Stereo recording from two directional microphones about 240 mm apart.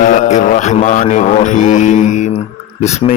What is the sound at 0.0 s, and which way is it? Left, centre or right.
Speech, left.